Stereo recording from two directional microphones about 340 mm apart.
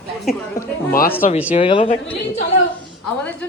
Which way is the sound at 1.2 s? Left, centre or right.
Centre.